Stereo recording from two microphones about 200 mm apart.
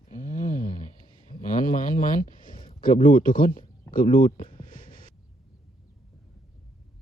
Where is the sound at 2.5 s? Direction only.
25° left (ahead or behind).